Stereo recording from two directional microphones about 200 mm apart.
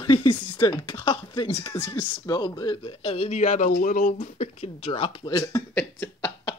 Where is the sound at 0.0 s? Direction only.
25° left (ahead or behind).